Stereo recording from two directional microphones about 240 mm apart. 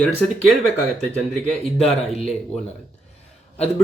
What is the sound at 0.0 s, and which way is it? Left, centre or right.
Speech, centre.